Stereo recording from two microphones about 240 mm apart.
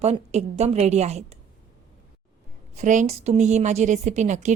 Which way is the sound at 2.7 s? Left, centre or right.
Right.